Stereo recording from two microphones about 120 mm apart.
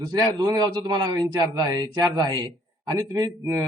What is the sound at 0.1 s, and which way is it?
Speech, 35° right (ahead or behind).